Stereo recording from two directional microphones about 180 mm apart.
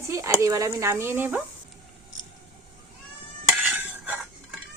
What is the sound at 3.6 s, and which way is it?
Stir, 10° right (ahead or behind).